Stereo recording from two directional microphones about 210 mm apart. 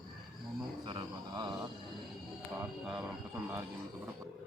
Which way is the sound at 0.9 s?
20° right (ahead or behind).